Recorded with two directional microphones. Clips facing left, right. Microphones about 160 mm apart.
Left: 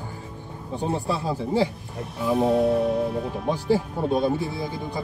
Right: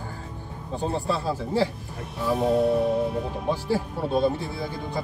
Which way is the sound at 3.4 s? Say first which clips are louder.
Left 4 dB; 15° left (ahead or behind).